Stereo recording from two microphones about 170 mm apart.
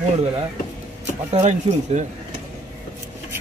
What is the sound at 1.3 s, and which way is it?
Speech, 45° right (ahead or behind).